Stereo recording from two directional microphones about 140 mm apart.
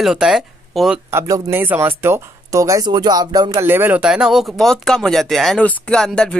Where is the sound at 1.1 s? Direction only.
20° right (ahead or behind).